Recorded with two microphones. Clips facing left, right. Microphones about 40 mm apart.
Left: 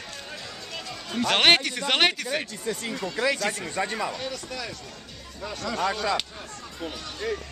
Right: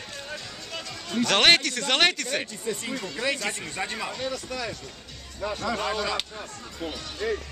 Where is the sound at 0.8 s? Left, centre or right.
Centre.